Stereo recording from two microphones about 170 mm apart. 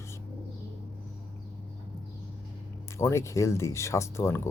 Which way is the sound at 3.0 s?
15° left (ahead or behind).